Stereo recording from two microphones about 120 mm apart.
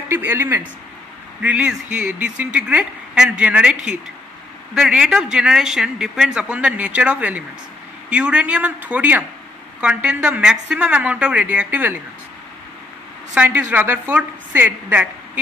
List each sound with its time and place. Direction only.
0.1 s speech: 15° right (ahead or behind)
13.3 s speech: 10° right (ahead or behind)